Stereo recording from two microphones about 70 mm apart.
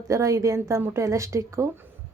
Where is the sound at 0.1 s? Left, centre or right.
Right.